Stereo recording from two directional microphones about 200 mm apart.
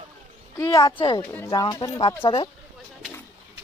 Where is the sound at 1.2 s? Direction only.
10° left (ahead or behind).